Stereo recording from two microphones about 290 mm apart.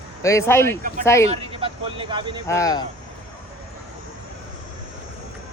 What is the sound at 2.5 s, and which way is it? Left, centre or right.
Speech, centre.